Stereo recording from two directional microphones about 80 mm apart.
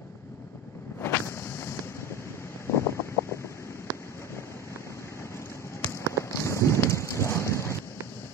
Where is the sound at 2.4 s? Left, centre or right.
Left.